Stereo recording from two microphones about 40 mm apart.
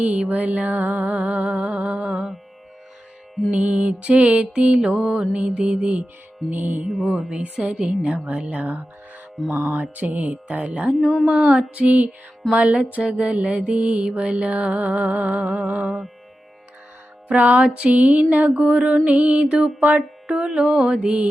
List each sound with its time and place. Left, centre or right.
0.0 s music: right
2.0 s mantra: centre
3.5 s music: right
4.5 s mantra: right
6.5 s speech: right
7.2 s mantra: right
8.2 s music: right
9.6 s speech: right
11.3 s music: right
17.3 s music: right
18.7 s music: right
19.5 s mantra: centre